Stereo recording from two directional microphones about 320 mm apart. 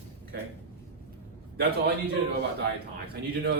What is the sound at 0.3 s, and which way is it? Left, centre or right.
Speech, right.